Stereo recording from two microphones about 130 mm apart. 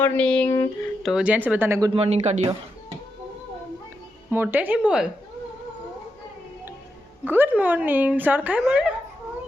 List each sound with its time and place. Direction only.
0.0 s speech: 10° left (ahead or behind)
0.4 s a sound: 25° left (ahead or behind)
1.0 s speech: 5° right (ahead or behind)
2.0 s speech: 55° right (ahead or behind)
4.3 s speech: 15° right (ahead or behind)
7.3 s speech: 15° right (ahead or behind)